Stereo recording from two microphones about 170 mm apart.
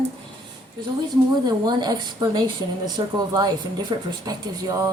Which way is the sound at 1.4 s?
25° right (ahead or behind).